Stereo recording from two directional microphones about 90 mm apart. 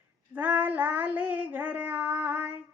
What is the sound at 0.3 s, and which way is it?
Child singing, 20° right (ahead or behind).